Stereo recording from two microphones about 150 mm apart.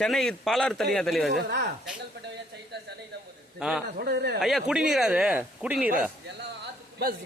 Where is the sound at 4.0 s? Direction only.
90° right.